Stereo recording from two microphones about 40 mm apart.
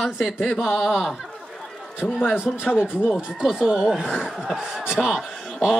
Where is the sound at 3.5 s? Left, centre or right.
Centre.